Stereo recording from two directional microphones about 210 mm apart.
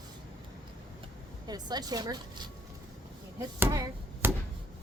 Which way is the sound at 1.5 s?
20° right (ahead or behind).